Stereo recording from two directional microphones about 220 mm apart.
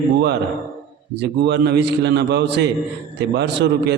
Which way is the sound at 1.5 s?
50° right (ahead or behind).